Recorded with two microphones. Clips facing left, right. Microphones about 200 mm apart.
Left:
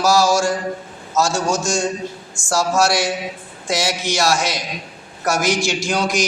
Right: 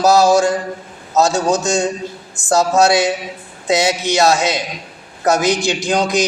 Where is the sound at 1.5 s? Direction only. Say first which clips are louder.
Right 4 dB; 60° right (ahead or behind).